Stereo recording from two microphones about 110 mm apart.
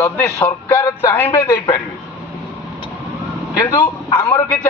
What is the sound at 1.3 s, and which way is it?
Speech, 35° left (ahead or behind).